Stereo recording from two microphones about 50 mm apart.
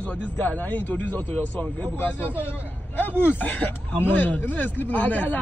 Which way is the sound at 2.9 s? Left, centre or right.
Left.